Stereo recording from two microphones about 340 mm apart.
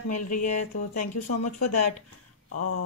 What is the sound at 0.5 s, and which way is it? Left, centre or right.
Speech, left.